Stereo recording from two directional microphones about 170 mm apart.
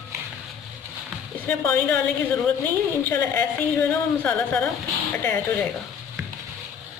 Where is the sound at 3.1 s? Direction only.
10° left (ahead or behind).